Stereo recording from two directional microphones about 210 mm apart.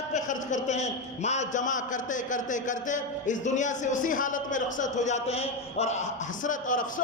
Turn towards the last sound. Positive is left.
turn(degrees=40)  # may be behind; listen again after turning